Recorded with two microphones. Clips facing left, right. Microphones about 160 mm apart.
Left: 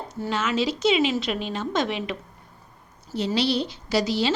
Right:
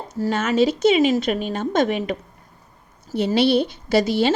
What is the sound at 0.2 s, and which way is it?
A woman's voice, 45° right (ahead or behind).